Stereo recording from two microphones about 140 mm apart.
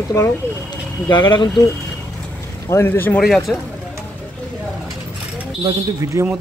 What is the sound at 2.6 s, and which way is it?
Speech, 15° left (ahead or behind).